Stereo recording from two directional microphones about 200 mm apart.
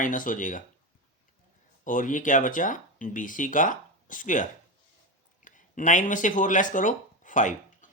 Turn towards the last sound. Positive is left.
turn(degrees=40)  # may be behind; listen again after turning